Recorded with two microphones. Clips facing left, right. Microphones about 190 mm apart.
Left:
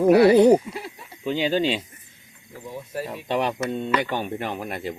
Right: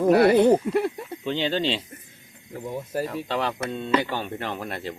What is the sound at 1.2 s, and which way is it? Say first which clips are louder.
Speech: left 3 dB; 10° left (ahead or behind).